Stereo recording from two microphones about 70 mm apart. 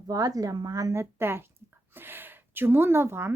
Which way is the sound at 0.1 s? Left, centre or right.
Right.